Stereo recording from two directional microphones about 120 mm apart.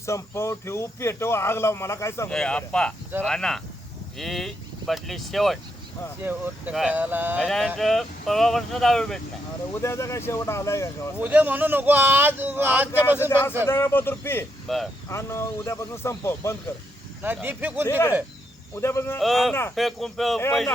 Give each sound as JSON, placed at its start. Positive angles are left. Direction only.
{"t": 0.0, "sound": "speech", "side_deg": 25}
{"t": 2.3, "sound": "speech", "side_deg": 5}
{"t": 6.2, "sound": "speech", "side_deg": -20}
{"t": 7.4, "sound": "speech", "side_deg": 5}
{"t": 9.8, "sound": "speech", "side_deg": 25}
{"t": 11.2, "sound": "speech", "side_deg": -15}
{"t": 13.7, "sound": "speech", "side_deg": 20}
{"t": 14.7, "sound": "speech", "side_deg": 0}
{"t": 15.1, "sound": "speech", "side_deg": 20}
{"t": 17.4, "sound": "speech", "side_deg": -15}
{"t": 17.8, "sound": "speech", "side_deg": 20}
{"t": 19.2, "sound": "speech", "side_deg": 0}